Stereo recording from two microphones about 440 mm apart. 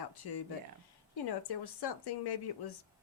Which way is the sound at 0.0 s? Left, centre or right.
Left.